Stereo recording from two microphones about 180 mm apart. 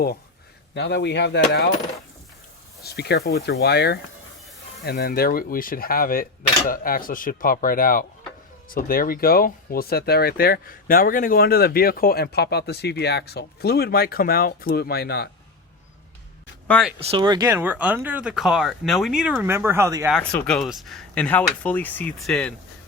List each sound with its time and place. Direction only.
0.7 s a sound: 70° left (ahead or behind)
2.8 s speech: 65° left (ahead or behind)
16.6 s speech: 5° left (ahead or behind)
17.0 s speech: 30° right (ahead or behind); by 20.1 s 15° right (ahead or behind)
20.1 s speech: 5° left (ahead or behind)